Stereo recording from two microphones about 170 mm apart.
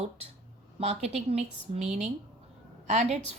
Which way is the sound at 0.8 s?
40° right (ahead or behind).